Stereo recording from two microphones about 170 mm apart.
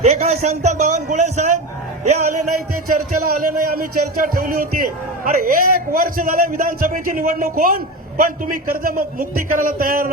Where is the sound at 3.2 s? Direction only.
55° right (ahead or behind).